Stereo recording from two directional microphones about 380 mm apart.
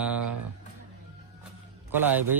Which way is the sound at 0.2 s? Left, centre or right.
Right.